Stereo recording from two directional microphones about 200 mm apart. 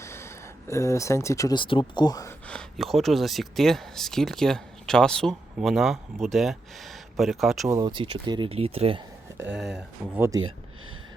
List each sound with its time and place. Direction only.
0.0 s speech: 15° left (ahead or behind)
2.5 s speech: centre (ahead or behind)
7.7 s speech: 20° right (ahead or behind)
9.4 s speech: 5° right (ahead or behind)